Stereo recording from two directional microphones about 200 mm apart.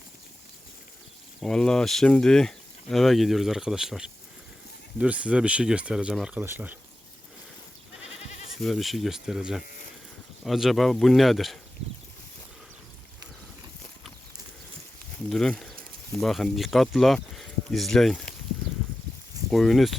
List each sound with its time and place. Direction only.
1.4 s speech: 5° left (ahead or behind)
8.0 s goat: 35° left (ahead or behind)
8.6 s speech: centre (ahead or behind)
15.3 s speech: centre (ahead or behind)
19.5 s speech: centre (ahead or behind)